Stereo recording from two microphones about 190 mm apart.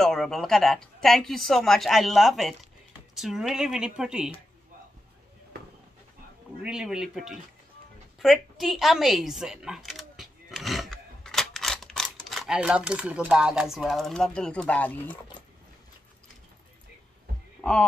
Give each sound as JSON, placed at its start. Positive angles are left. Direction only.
{"t": 0.0, "sound": "speech", "side_deg": 0}
{"t": 6.6, "sound": "speech", "side_deg": -5}